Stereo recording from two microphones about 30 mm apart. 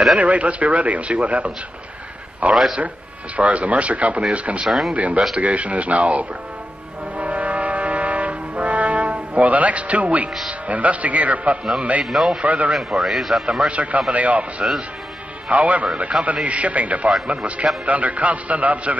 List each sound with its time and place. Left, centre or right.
0.2 s a man's voice: right
4.6 s speech: centre
4.9 s speech: right
7.2 s foghorn: right
10.7 s speech: right
12.1 s a man's voice: centre
12.4 s speech: right
12.7 s speech: centre
13.7 s speech: right
14.6 s speech: right
15.5 s a man's voice: right